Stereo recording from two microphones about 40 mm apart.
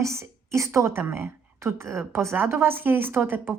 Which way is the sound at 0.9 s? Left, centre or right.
Right.